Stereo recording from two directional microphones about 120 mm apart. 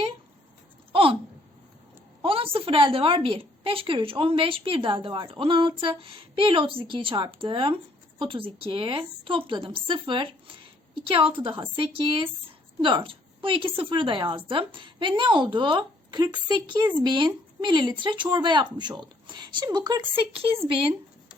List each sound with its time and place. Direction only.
0.9 s a sound: 50° right (ahead or behind)
2.2 s a woman's voice: 50° right (ahead or behind)
20.1 s a woman's voice: 50° right (ahead or behind)